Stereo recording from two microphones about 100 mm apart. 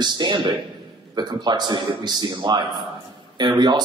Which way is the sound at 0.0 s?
45° right (ahead or behind).